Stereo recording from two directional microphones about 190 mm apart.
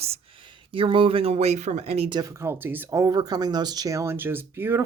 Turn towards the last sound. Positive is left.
turn(degrees=-10)  # may be behind; listen again after turning